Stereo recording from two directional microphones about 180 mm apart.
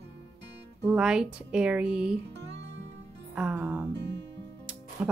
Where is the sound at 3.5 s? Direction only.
20° right (ahead or behind).